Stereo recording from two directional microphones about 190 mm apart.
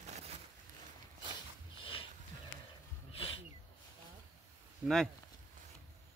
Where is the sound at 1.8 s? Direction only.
30° left (ahead or behind).